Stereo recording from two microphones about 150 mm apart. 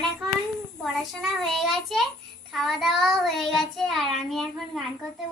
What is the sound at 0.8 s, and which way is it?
A child's voice, centre (ahead or behind).